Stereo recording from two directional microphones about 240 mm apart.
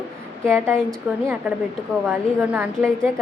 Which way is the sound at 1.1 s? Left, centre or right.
Centre.